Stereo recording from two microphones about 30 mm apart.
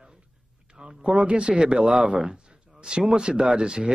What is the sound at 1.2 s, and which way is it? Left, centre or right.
A man's voice, right.